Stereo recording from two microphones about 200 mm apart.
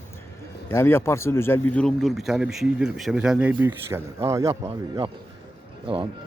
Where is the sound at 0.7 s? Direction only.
10° left (ahead or behind); by 4.4 s 15° right (ahead or behind).